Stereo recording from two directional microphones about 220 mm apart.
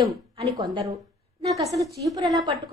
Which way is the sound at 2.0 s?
15° right (ahead or behind).